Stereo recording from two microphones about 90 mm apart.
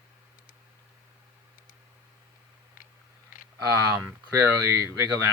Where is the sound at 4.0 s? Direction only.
30° right (ahead or behind).